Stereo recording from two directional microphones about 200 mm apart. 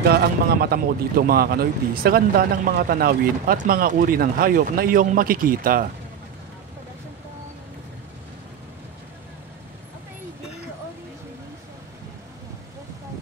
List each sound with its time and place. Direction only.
0.0 s speech: 50° right (ahead or behind)